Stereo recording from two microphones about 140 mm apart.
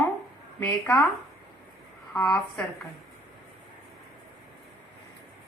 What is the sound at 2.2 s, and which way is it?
Speech, 5° left (ahead or behind).